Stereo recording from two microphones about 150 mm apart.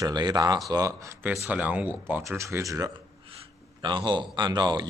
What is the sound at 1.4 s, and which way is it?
Speech, 10° right (ahead or behind).